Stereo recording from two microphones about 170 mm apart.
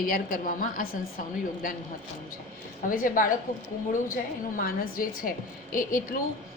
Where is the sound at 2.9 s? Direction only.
55° left (ahead or behind).